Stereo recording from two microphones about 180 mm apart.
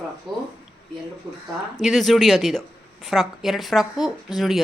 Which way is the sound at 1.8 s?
Centre (ahead or behind).